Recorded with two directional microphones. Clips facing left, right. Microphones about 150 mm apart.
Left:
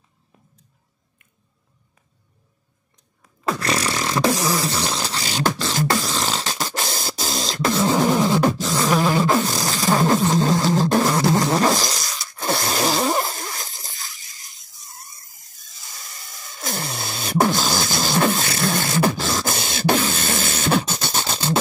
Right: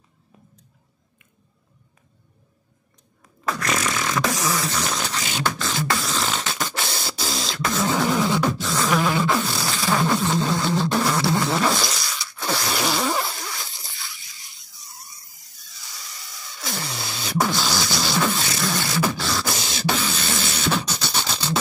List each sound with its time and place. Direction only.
3.4 s beatboxing: 30° left (ahead or behind)
11.1 s a sound: 40° left (ahead or behind)
11.5 s zipper: 40° left (ahead or behind)
19.0 s beatboxing: 45° left (ahead or behind)